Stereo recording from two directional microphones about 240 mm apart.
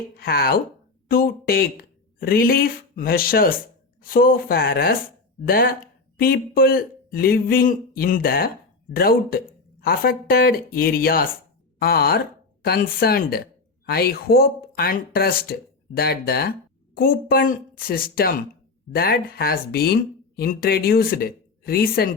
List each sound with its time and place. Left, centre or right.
0.2 s speech: left